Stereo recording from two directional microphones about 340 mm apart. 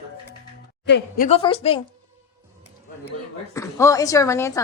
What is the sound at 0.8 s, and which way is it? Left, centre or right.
Speech, left.